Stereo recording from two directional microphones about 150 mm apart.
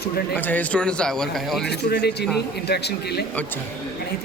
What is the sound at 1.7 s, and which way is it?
Speech, 90° left.